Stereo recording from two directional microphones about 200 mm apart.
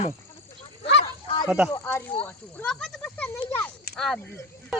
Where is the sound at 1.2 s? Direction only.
25° left (ahead or behind).